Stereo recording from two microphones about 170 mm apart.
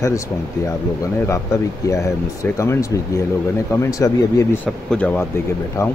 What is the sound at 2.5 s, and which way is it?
Speech, 15° left (ahead or behind).